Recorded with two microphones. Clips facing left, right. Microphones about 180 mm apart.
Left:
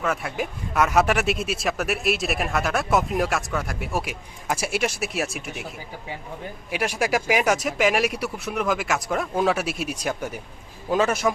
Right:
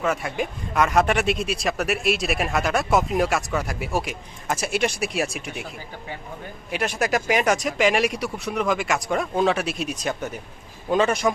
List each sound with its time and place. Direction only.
0.0 s speech: centre (ahead or behind)
6.7 s speech: 10° left (ahead or behind)